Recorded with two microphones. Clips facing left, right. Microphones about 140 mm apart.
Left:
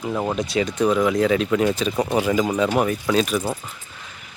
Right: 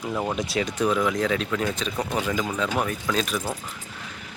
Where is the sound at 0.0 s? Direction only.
10° left (ahead or behind).